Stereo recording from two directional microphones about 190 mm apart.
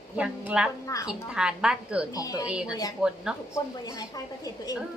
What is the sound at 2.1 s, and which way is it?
Speech, 20° left (ahead or behind).